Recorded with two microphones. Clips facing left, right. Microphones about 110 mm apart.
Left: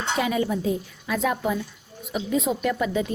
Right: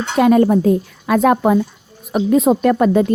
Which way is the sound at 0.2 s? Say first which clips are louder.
Right 14 dB; 50° right (ahead or behind).